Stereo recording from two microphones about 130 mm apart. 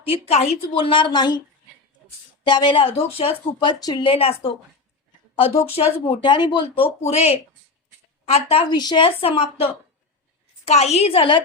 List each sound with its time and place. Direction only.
0.0 s speech: 50° left (ahead or behind); by 1.4 s 35° left (ahead or behind)
2.5 s a woman's voice: 35° left (ahead or behind)
7.0 s speech: 55° left (ahead or behind)
8.7 s speech: 35° left (ahead or behind); by 9.6 s 50° left (ahead or behind)
10.7 s speech: 55° left (ahead or behind); by 11.4 s 40° left (ahead or behind)